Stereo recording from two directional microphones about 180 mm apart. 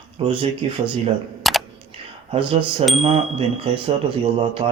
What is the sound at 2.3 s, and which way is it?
Speech, 30° right (ahead or behind).